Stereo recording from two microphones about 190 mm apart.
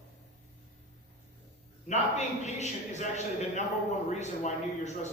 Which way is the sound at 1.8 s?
35° left (ahead or behind).